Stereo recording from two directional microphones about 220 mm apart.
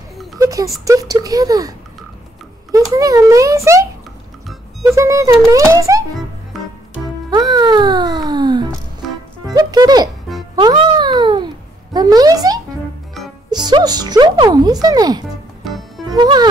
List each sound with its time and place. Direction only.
0.4 s a child's voice: 15° right (ahead or behind)
2.7 s a child's voice: 15° right (ahead or behind)
4.9 s a child's voice: 15° right (ahead or behind)
7.2 s music: 20° right (ahead or behind)
10.5 s babbling: 20° right (ahead or behind)
13.5 s music: 20° right (ahead or behind)
15.7 s music: centre (ahead or behind)
16.2 s music: 20° right (ahead or behind)